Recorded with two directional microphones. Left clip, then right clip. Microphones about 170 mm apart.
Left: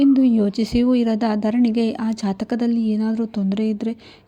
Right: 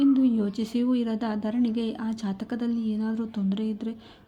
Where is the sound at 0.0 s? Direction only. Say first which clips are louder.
Left 6 dB; 35° left (ahead or behind).